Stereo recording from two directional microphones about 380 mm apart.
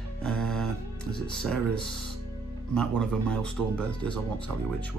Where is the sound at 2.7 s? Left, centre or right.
Centre.